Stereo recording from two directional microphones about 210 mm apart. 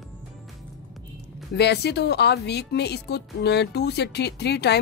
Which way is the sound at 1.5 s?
50° left (ahead or behind).